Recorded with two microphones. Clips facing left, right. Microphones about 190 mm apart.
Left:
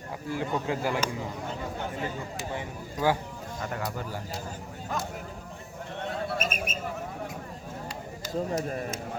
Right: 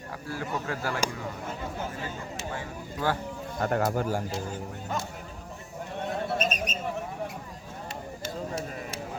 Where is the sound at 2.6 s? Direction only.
15° left (ahead or behind).